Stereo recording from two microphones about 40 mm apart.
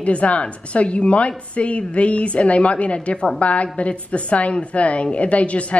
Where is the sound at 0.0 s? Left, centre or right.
Left.